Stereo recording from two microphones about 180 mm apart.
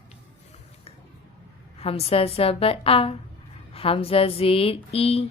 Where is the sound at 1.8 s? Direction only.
35° left (ahead or behind).